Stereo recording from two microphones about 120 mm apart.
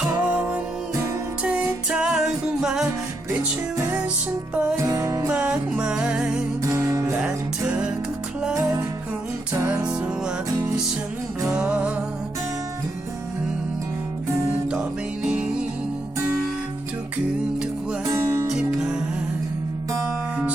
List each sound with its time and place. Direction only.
0.0 s music: 10° right (ahead or behind)
4.5 s music: 10° right (ahead or behind)
4.8 s music: 25° right (ahead or behind)
5.3 s music: 10° right (ahead or behind)
6.6 s music: 25° right (ahead or behind)
7.2 s music: 10° right (ahead or behind)
9.5 s music: 20° right (ahead or behind)
9.8 s music: 10° right (ahead or behind)
11.4 s music: 5° right (ahead or behind)
15.2 s music: 5° right (ahead or behind)
18.0 s music: 25° right (ahead or behind)
18.4 s music: 5° right (ahead or behind)